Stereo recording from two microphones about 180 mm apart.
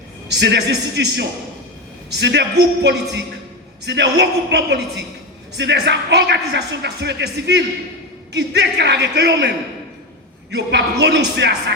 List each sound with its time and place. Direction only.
0.3 s speech: 70° right (ahead or behind)
10.5 s speech: 70° right (ahead or behind)